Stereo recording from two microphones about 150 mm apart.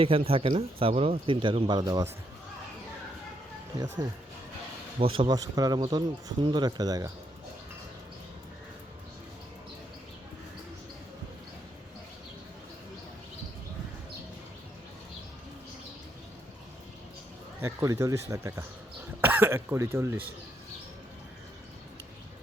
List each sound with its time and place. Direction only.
0.0 s speech: 40° right (ahead or behind)
4.9 s speech: 35° right (ahead or behind)
17.6 s speech: 20° right (ahead or behind)